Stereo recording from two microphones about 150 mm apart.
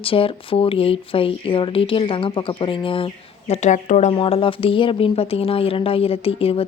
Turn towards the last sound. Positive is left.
turn(degrees=40)  # may be behind; listen again after turning